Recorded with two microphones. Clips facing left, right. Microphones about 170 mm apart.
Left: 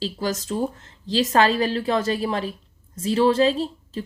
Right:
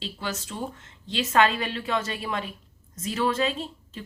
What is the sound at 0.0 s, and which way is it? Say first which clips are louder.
A woman's voice: left 7 dB; 40° left (ahead or behind).